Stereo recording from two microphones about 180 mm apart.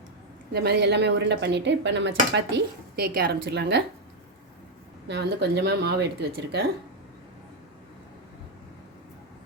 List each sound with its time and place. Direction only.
0.5 s speech: 65° right (ahead or behind); by 2.4 s 85° right
2.9 s speech: 60° right (ahead or behind)
5.0 s speech: 70° right (ahead or behind)